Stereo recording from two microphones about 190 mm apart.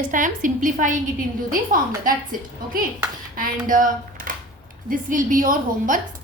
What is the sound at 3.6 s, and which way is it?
A woman's voice, 45° right (ahead or behind).